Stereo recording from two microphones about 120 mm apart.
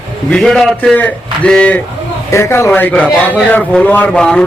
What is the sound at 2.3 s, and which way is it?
A man's voice, 20° left (ahead or behind).